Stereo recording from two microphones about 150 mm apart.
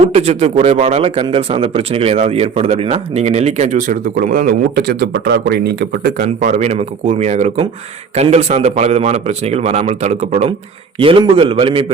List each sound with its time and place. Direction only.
0.0 s speech: 45° right (ahead or behind)
11.0 s a man's voice: 35° right (ahead or behind)